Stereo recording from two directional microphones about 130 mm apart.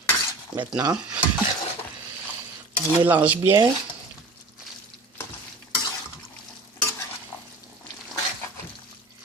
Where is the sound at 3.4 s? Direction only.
30° right (ahead or behind).